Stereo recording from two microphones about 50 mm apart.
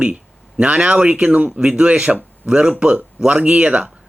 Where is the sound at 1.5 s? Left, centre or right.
Centre.